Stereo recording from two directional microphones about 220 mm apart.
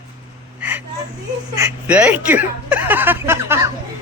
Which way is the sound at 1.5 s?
15° right (ahead or behind).